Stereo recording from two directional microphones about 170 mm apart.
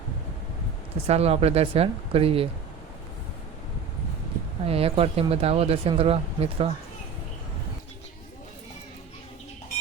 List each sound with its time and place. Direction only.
1.0 s speech: 35° right (ahead or behind)
4.6 s speech: 35° right (ahead or behind)